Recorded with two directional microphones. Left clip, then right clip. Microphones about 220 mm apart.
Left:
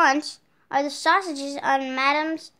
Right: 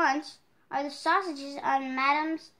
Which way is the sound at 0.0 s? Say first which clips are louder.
Left 7 dB; 45° left (ahead or behind).